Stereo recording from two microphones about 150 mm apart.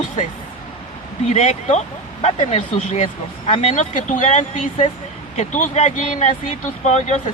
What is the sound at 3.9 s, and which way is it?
Speech, 55° left (ahead or behind).